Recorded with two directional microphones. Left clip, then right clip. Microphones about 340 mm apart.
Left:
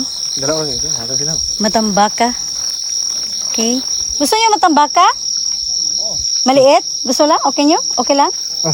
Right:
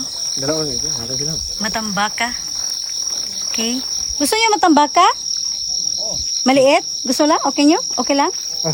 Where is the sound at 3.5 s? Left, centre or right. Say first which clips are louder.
Left 5 dB; centre.